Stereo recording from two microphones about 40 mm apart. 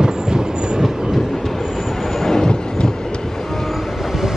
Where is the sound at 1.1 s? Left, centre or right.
Centre.